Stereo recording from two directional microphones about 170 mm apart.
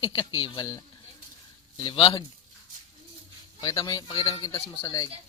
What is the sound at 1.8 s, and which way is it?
Speech, 30° left (ahead or behind).